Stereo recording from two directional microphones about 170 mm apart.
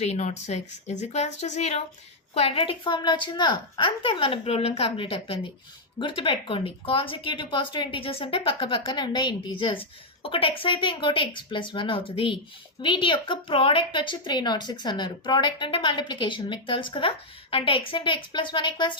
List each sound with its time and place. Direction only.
0.0 s a woman's voice: 40° left (ahead or behind)